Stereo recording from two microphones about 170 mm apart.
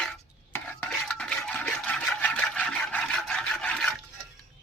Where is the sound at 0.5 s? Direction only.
10° left (ahead or behind).